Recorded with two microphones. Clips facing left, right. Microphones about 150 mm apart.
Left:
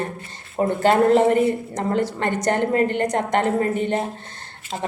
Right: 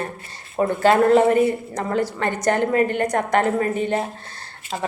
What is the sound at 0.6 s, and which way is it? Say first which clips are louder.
A woman's voice: right 1 dB; 20° left (ahead or behind).